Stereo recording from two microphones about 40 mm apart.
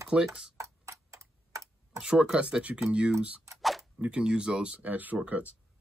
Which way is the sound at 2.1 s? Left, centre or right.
Centre.